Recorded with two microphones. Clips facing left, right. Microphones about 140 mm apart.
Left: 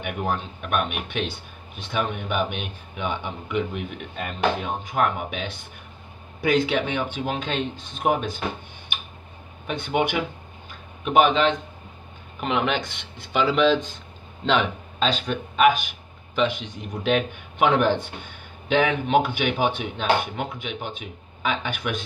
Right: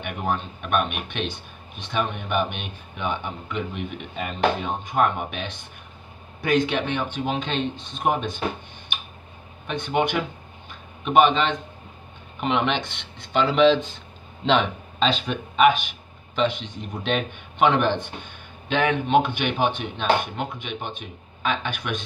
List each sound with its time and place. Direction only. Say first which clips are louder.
0.0 s speech: even; 5° left (ahead or behind)
9.9 s speech: even; 10° left (ahead or behind)
19.0 s speech: even; 5° left (ahead or behind)